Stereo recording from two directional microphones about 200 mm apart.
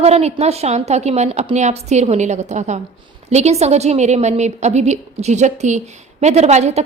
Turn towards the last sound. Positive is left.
turn(degrees=-35)  # may be behind; listen again after turning